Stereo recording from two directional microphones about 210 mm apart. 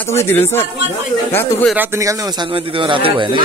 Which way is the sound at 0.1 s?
10° left (ahead or behind).